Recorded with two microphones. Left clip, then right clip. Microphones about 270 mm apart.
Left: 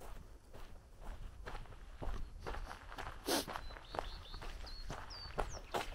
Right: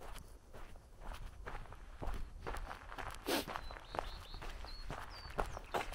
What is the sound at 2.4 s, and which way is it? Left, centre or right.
Walk, centre.